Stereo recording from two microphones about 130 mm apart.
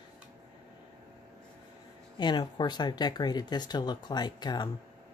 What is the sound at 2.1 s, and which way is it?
Speech, 35° left (ahead or behind).